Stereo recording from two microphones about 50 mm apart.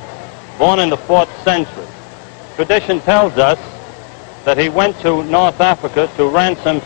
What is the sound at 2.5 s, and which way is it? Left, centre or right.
A man's voice, centre.